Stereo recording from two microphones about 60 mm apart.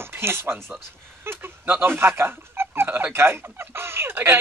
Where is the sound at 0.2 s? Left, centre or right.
Right.